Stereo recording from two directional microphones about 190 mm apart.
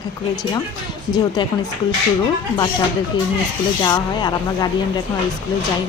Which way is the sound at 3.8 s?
20° left (ahead or behind).